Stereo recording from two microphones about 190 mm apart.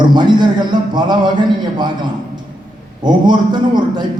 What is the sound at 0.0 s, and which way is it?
A man's voice, 25° right (ahead or behind).